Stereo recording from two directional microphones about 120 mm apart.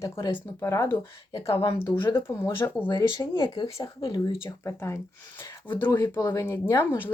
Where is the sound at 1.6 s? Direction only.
45° left (ahead or behind).